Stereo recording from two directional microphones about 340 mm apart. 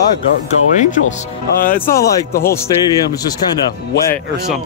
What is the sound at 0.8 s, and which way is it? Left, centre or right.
Speech, left.